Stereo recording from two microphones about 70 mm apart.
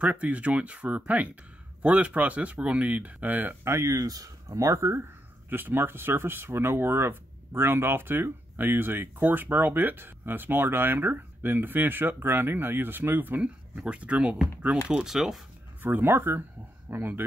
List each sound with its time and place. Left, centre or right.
0.0 s speech: centre
3.6 s speech: right
5.5 s speech: right
15.0 s speech: centre
15.8 s speech: right